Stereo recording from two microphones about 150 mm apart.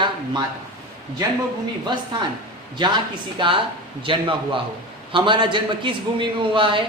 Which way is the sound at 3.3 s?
35° right (ahead or behind).